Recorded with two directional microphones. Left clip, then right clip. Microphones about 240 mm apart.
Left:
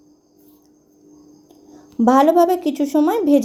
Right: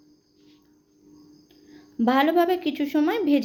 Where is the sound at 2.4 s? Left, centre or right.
Left.